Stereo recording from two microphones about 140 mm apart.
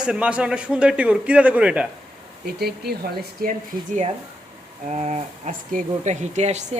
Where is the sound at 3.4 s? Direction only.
90° right.